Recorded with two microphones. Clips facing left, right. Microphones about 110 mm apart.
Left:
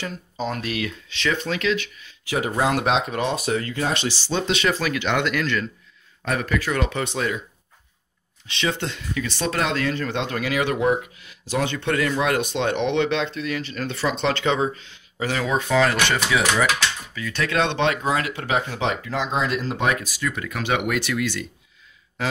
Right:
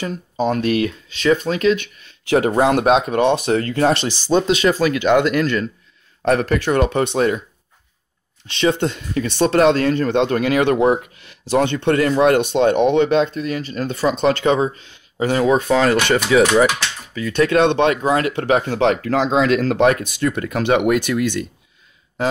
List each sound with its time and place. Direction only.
0.0 s speech: 50° right (ahead or behind)
6.7 s speech: 50° right (ahead or behind)
8.7 s speech: 50° right (ahead or behind)
11.9 s speech: 45° right (ahead or behind)
17.3 s speech: 45° right (ahead or behind)
18.8 s speech: 65° right (ahead or behind); by 19.9 s 90° right
19.9 s speech: 55° right (ahead or behind)